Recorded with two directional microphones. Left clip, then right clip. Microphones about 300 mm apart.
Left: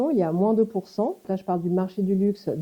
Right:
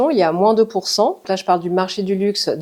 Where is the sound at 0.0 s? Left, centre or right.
Centre.